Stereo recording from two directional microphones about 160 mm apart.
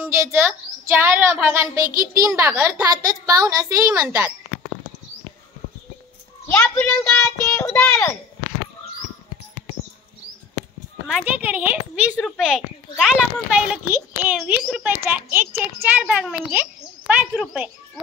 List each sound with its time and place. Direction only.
0.0 s a woman's voice: 15° right (ahead or behind)
6.4 s a child's voice: 10° left (ahead or behind)
11.1 s a woman's voice: 5° right (ahead or behind)